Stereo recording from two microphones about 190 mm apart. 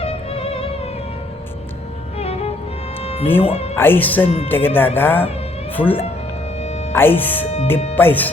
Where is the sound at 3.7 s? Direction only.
10° left (ahead or behind).